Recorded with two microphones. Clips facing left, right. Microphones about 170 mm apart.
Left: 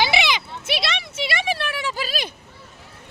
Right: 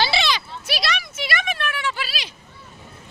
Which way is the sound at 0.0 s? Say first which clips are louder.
Left 1 dB; 15° left (ahead or behind).